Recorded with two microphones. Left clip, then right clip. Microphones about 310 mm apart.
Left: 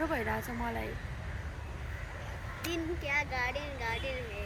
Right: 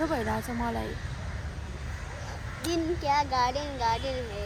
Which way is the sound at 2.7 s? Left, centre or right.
Centre.